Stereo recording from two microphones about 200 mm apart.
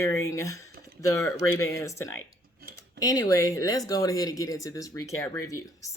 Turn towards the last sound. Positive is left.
turn(degrees=15)  # may be behind; listen again after turning